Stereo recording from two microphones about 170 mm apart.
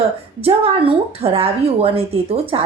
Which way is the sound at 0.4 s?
35° right (ahead or behind).